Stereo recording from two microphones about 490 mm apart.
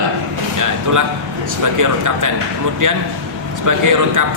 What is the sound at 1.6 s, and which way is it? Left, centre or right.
Speech, right.